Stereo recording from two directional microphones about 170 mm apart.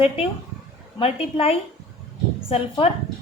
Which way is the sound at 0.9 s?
35° left (ahead or behind).